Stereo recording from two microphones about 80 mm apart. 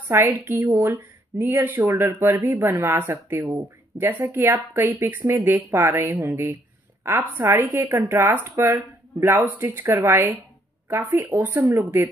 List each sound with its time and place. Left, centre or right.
0.1 s speech: right